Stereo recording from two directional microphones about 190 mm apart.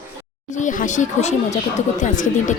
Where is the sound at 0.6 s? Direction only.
40° left (ahead or behind).